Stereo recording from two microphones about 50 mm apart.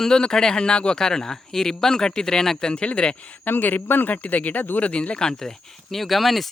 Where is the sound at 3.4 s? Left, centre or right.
Left.